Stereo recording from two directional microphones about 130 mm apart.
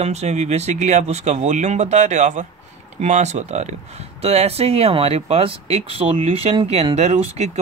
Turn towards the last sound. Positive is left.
turn(degrees=-55)  # may be behind; listen again after turning